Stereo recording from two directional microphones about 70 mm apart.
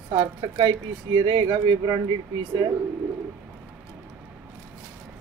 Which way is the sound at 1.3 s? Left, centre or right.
Right.